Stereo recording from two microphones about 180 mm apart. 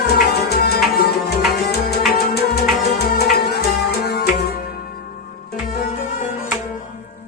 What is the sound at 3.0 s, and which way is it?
Music, 60° left (ahead or behind).